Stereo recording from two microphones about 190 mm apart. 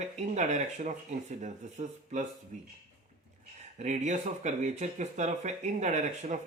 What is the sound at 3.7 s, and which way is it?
Speech, 40° right (ahead or behind).